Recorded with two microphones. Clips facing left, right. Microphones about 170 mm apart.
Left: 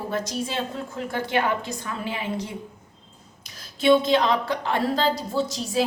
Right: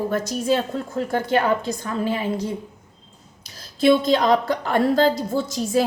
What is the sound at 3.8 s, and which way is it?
A woman's voice, 40° right (ahead or behind).